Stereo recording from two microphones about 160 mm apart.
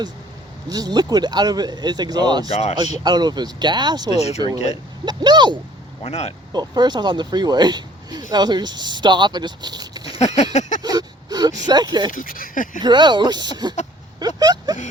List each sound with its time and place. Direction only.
0.7 s speech: 25° right (ahead or behind)
2.5 s speech: 40° left (ahead or behind)
3.0 s speech: 25° right (ahead or behind)
6.0 s speech: 40° left (ahead or behind)
6.5 s speech: 25° right (ahead or behind)
10.2 s a sound: 45° left (ahead or behind)
10.8 s speech: 25° right (ahead or behind)
12.1 s speech: 60° left (ahead or behind)
12.8 s speech: 30° right (ahead or behind)
14.2 s a sound: 25° right (ahead or behind)